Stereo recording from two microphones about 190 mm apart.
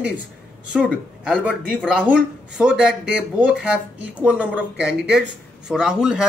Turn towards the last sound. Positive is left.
turn(degrees=-5)  # may be behind; listen again after turning